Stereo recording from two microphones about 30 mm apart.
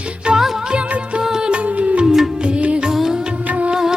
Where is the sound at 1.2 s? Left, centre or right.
Right.